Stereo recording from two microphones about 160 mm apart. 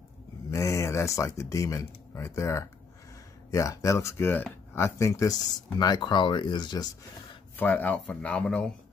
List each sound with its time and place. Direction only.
0.5 s speech: 20° left (ahead or behind)
7.5 s speech: 10° left (ahead or behind)